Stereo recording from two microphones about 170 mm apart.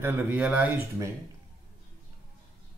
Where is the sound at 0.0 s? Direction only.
10° right (ahead or behind).